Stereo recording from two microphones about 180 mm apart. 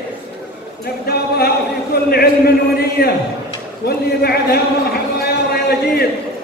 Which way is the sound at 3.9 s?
60° left (ahead or behind).